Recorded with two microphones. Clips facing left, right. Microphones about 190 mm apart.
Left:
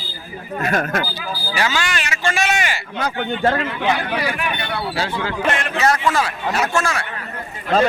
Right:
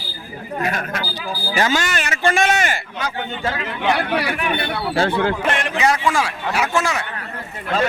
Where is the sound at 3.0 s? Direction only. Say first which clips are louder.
Left 9 dB; 55° left (ahead or behind).